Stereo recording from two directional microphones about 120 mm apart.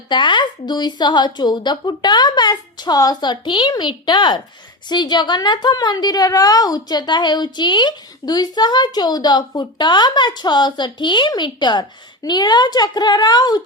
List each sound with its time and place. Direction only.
0.1 s a woman's voice: 40° left (ahead or behind)